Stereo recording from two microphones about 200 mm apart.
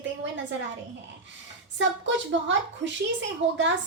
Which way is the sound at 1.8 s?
65° right (ahead or behind).